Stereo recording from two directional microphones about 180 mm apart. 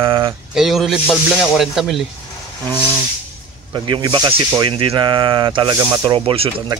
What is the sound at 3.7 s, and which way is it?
Speech, 25° right (ahead or behind).